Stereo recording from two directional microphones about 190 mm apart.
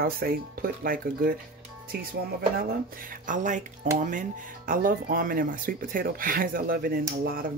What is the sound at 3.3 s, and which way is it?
Dishes, 40° right (ahead or behind).